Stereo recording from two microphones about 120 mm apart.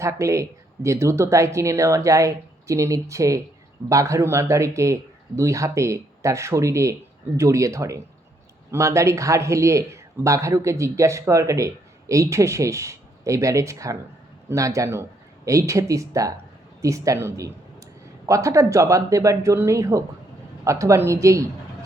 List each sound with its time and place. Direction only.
0.0 s speech: 25° right (ahead or behind)